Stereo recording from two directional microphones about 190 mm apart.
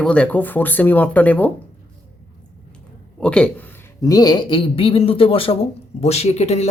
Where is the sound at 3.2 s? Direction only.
5° left (ahead or behind).